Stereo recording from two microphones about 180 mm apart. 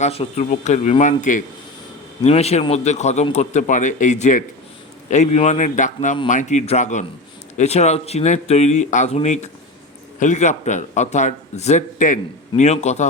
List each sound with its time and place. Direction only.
0.0 s a man's voice: 35° left (ahead or behind)